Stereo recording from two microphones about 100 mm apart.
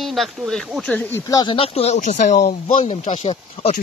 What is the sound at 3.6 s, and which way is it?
Speech, 75° left (ahead or behind).